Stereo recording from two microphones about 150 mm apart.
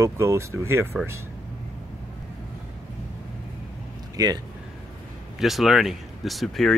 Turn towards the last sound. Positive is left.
turn(degrees=0)  # may be behind; listen again after turning